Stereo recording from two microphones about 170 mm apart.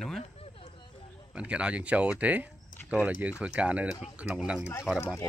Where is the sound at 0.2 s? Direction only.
35° left (ahead or behind).